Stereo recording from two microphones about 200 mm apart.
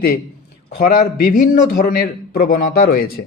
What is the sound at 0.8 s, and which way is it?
Speech, 45° left (ahead or behind).